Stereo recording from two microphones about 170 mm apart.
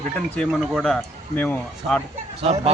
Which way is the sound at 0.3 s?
5° left (ahead or behind).